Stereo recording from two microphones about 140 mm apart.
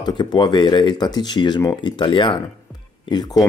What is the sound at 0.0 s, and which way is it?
Speech, 30° left (ahead or behind).